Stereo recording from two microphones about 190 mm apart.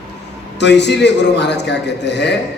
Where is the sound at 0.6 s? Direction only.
65° left (ahead or behind).